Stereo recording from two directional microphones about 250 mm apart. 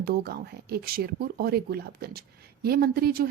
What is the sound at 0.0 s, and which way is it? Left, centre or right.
A woman's voice, right.